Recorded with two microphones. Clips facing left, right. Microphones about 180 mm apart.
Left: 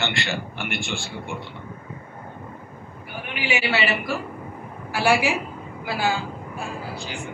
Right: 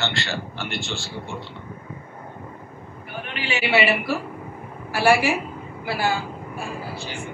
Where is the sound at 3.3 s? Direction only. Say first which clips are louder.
Left 3 dB; 15° left (ahead or behind).